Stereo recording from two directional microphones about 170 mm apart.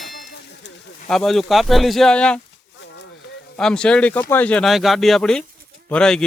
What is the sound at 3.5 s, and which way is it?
Speech, 5° left (ahead or behind).